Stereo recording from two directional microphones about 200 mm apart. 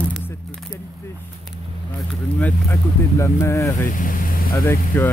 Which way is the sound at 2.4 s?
10° left (ahead or behind).